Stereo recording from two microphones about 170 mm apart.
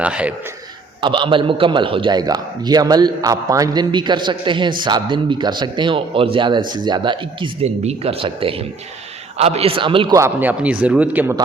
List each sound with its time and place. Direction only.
0.0 s a man's voice: 5° right (ahead or behind)
1.0 s a man's voice: 30° right (ahead or behind)
10.2 s a man's voice: 10° right (ahead or behind)